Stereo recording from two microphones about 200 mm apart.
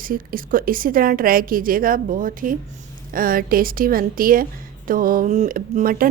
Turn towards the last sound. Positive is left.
turn(degrees=-45)  # may be behind; listen again after turning